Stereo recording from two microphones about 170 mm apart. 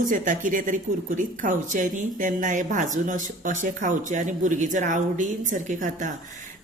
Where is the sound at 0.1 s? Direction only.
50° right (ahead or behind).